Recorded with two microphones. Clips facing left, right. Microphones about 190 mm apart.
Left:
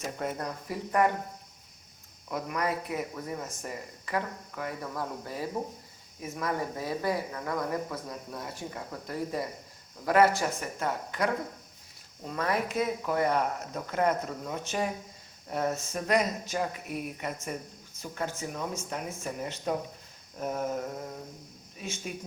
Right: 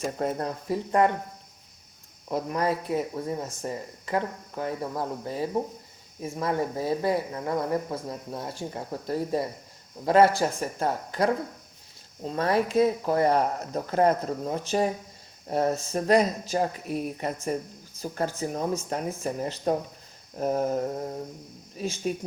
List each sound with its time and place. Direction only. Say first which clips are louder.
0.2 s speech: right 5 dB; 30° right (ahead or behind)
2.3 s speech: right 5 dB; 30° right (ahead or behind)